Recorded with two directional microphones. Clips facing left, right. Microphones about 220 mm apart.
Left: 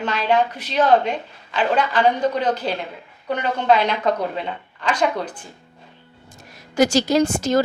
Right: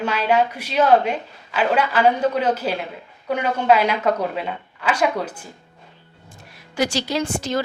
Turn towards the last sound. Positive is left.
turn(degrees=45)  # may be behind; listen again after turning